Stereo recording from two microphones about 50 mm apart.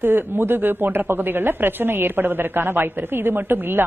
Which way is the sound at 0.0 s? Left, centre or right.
Right.